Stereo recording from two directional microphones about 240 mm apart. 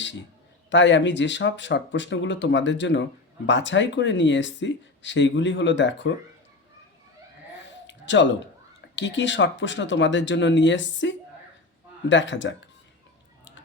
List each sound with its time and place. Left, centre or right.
0.0 s a man's voice: left
7.6 s a sound: left
9.0 s speech: left